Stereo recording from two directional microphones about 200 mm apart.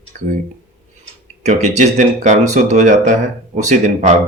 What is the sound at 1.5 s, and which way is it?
Speech, 35° right (ahead or behind).